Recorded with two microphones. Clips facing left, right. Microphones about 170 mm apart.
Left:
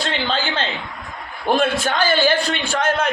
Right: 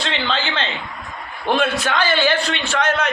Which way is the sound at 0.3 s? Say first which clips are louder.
Even; 10° left (ahead or behind).